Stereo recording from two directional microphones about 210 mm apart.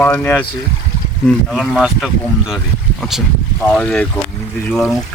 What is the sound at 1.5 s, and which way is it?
Speech, centre (ahead or behind).